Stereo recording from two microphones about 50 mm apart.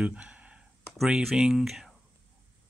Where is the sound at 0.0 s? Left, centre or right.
Right.